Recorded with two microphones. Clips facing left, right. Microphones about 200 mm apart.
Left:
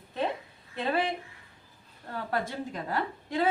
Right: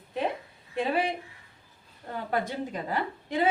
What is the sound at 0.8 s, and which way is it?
Speech, 15° right (ahead or behind).